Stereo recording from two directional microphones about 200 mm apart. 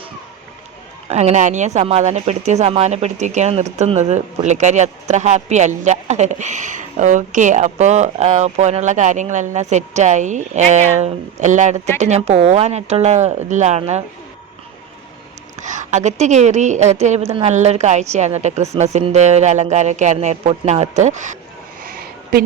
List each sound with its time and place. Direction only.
1.1 s speech: 35° right (ahead or behind)
15.6 s speech: 35° right (ahead or behind)
21.8 s a sound: 50° right (ahead or behind)